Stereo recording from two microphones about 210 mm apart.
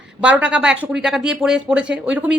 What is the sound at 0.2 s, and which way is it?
A woman's voice, 5° right (ahead or behind).